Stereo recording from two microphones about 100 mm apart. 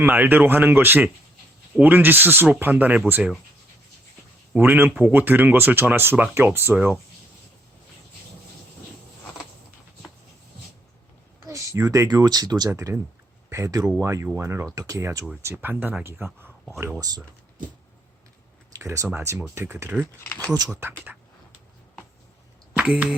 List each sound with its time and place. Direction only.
0.0 s speech: 20° right (ahead or behind)
4.5 s speech: 20° right (ahead or behind)
11.4 s speech: 35° right (ahead or behind)
15.5 s speech: 20° right (ahead or behind)
17.0 s speech: 40° right (ahead or behind)
18.7 s a sound: 30° right (ahead or behind)
19.0 s speech: 25° right (ahead or behind)
20.2 s speech: 20° left (ahead or behind)
22.7 s speech: 10° right (ahead or behind)